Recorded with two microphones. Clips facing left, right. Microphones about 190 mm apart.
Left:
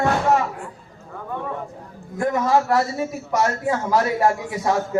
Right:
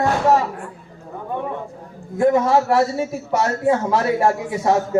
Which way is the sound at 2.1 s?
25° right (ahead or behind).